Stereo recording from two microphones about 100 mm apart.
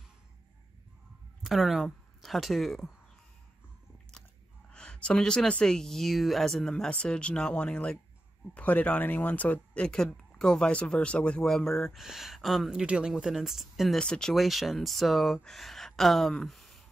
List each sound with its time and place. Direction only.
1.4 s speech: centre (ahead or behind)
4.7 s speech: 10° left (ahead or behind)
13.9 s speech: 10° left (ahead or behind)